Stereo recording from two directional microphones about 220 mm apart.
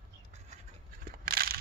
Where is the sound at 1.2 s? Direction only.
45° right (ahead or behind).